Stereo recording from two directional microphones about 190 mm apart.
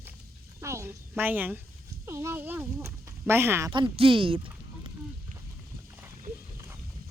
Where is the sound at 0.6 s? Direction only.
15° right (ahead or behind).